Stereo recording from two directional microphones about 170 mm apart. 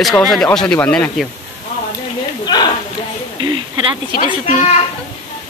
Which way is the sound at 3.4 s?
25° right (ahead or behind).